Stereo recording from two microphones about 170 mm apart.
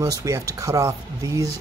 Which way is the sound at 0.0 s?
20° right (ahead or behind).